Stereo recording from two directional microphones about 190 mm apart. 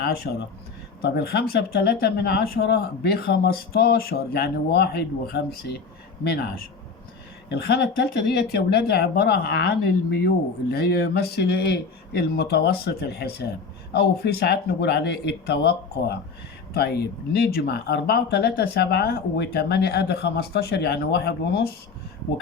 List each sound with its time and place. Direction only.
0.0 s speech: 55° left (ahead or behind)